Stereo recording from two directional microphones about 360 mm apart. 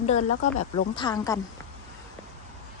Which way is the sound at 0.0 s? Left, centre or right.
Centre.